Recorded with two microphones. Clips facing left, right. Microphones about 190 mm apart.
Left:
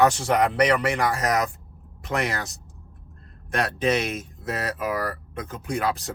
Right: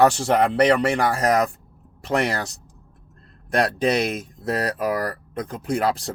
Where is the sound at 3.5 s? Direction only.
35° right (ahead or behind).